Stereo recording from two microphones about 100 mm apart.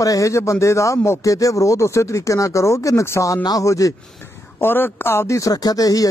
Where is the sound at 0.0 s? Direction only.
35° left (ahead or behind).